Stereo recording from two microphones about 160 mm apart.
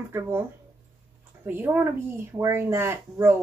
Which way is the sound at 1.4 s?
10° right (ahead or behind).